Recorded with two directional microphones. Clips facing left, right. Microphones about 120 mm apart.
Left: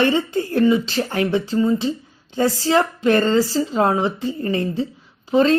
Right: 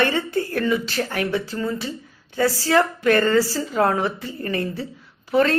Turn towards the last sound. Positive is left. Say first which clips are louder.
# left 3 dB
turn(degrees=20)  # may be behind; listen again after turning